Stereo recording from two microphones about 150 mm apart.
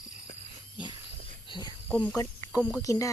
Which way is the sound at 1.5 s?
30° left (ahead or behind).